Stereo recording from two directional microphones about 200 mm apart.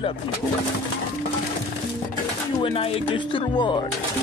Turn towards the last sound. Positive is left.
turn(degrees=25)  # may be behind; listen again after turning